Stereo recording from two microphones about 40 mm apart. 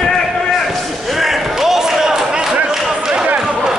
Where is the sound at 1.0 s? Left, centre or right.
Centre.